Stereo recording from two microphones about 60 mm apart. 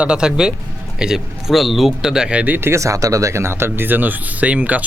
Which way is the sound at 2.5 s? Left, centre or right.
Right.